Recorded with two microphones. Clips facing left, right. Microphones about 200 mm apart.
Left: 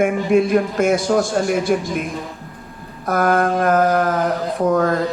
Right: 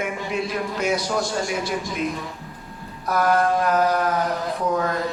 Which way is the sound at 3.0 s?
50° left (ahead or behind).